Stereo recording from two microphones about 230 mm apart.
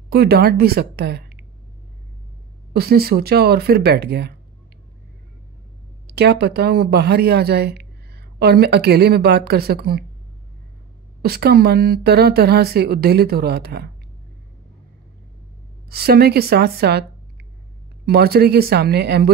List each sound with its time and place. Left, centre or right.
0.1 s speech: right
2.7 s speech: right
6.1 s speech: right
11.2 s speech: right
15.9 s speech: right
18.0 s speech: right